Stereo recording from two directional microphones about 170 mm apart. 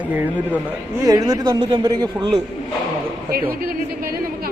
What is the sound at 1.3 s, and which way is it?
A man's voice, 20° right (ahead or behind).